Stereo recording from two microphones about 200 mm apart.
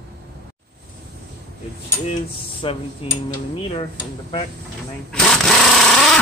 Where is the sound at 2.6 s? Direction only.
30° left (ahead or behind).